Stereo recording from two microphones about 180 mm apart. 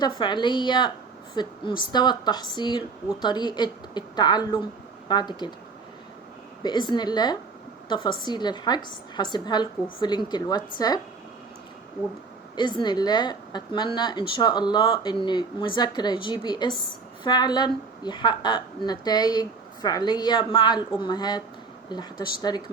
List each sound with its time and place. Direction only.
0.0 s a woman's voice: 25° left (ahead or behind)
6.6 s a woman's voice: 25° left (ahead or behind)
12.5 s a woman's voice: 25° left (ahead or behind)